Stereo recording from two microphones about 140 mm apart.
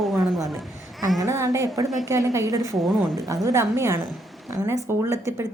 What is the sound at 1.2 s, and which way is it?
A woman's voice, 25° right (ahead or behind).